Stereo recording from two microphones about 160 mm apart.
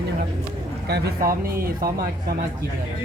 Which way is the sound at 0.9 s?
75° right (ahead or behind).